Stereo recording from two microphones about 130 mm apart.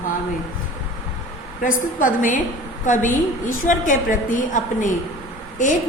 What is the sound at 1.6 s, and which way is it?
A woman's voice, 90° left.